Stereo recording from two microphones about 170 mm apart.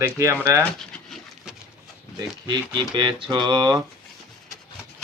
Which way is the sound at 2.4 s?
25° right (ahead or behind).